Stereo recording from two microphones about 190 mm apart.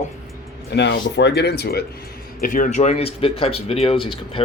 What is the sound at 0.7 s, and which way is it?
Speech, 65° left (ahead or behind).